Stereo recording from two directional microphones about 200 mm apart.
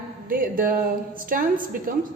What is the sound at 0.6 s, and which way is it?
A woman's voice, 45° right (ahead or behind).